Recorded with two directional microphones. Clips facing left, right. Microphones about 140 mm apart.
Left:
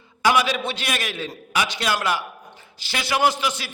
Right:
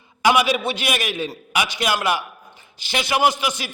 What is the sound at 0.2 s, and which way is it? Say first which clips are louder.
A man's voice: right 2 dB; 15° right (ahead or behind).